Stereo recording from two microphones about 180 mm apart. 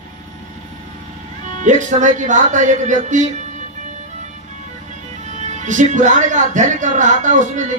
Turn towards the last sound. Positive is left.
turn(degrees=-45)  # may be behind; listen again after turning